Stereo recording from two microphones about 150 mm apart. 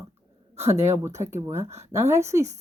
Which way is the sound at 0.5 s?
20° right (ahead or behind).